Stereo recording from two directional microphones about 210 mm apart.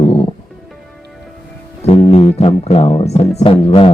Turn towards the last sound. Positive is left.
turn(degrees=25)  # may be behind; listen again after turning